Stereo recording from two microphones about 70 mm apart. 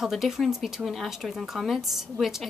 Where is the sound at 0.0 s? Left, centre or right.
Centre.